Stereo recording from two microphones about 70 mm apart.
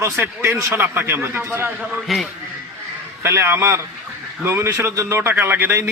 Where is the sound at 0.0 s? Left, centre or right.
Right.